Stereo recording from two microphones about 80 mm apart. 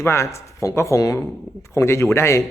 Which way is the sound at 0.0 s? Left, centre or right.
Left.